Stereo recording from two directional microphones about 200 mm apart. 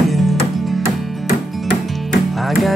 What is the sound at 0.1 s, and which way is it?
Music, centre (ahead or behind).